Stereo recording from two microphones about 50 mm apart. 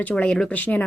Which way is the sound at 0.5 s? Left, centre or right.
Left.